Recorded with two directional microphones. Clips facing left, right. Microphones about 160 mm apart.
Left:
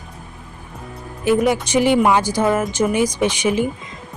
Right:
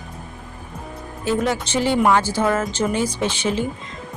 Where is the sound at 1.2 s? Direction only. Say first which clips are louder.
Left 5 dB; 15° left (ahead or behind).